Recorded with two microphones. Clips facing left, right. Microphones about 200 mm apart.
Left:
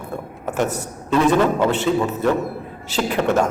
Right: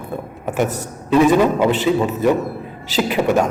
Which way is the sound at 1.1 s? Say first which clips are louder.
Right 3 dB; 10° right (ahead or behind).